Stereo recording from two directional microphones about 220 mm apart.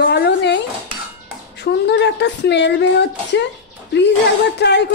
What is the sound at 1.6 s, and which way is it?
Speech, 50° left (ahead or behind).